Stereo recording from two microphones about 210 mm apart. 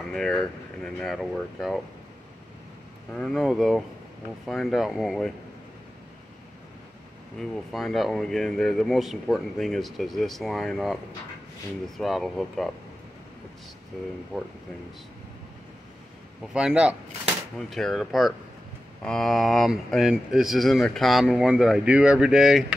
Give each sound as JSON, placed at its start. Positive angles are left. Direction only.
{"t": 0.0, "sound": "speech", "side_deg": 5}
{"t": 3.1, "sound": "speech", "side_deg": 5}
{"t": 7.3, "sound": "speech", "side_deg": 0}
{"t": 16.5, "sound": "speech", "side_deg": -5}